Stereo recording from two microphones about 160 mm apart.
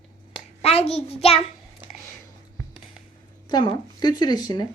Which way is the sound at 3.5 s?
25° left (ahead or behind).